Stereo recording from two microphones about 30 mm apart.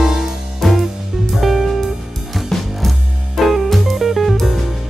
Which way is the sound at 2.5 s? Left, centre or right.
Centre.